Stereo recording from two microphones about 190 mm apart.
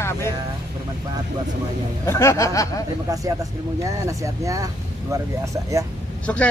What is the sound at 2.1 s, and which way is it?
Speech, 15° left (ahead or behind).